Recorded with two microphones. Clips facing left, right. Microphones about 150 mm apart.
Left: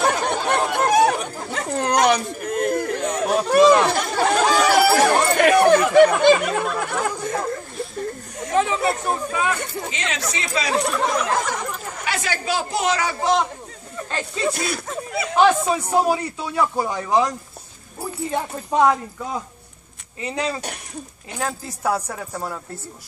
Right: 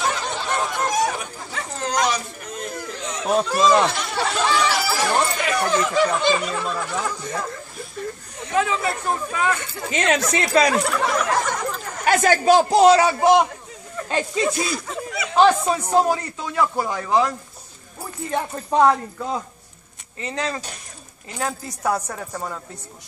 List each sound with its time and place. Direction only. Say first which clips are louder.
0.0 s chatter: left 5 dB; 55° left (ahead or behind)
1.7 s a sound: left 5 dB; 60° left (ahead or behind)
3.4 s chatter: left 6 dB; 60° left (ahead or behind)
8.5 s speech: left 2 dB; 25° left (ahead or behind)
9.9 s speech: right 11 dB; 50° right (ahead or behind)
10.8 s speech: even; 20° left (ahead or behind)
11.2 s speech: right 1 dB; centre (ahead or behind)
12.0 s a man's voice: right 10 dB; 45° right (ahead or behind); by 13.1 s 30° right (ahead or behind)
14.0 s speech: right 3 dB; 10° right (ahead or behind)
14.5 s speech: right 1 dB; 55° left (ahead or behind)
15.3 s a man's voice: right 1 dB; 5° left (ahead or behind)
18.3 s speech: right 2 dB; 5° left (ahead or behind)
20.2 s a man's voice: left 2 dB; 15° left (ahead or behind)